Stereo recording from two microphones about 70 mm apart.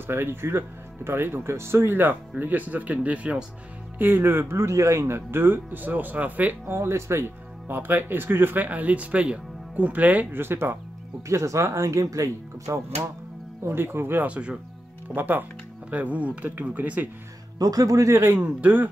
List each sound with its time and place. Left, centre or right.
0.0 s speech: right
4.0 s speech: right
6.7 s speech: right
11.2 s speech: right
13.7 s speech: right
14.2 s speech: centre
15.0 s speech: right
17.6 s speech: right
18.1 s speech: right
18.4 s speech: right